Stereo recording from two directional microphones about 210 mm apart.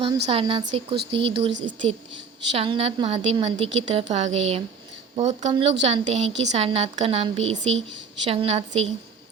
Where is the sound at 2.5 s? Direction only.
25° right (ahead or behind).